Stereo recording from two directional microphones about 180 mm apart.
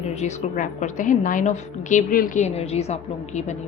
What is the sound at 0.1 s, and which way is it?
A woman's voice, 40° left (ahead or behind).